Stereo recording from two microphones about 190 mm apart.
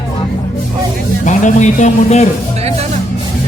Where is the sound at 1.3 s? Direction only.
40° left (ahead or behind).